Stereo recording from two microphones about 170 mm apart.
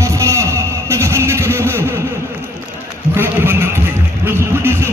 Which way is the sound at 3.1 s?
15° right (ahead or behind).